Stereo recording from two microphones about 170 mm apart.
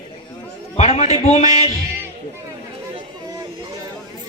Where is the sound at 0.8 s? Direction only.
40° left (ahead or behind).